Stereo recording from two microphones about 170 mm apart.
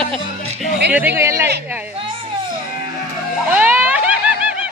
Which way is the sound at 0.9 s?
10° right (ahead or behind).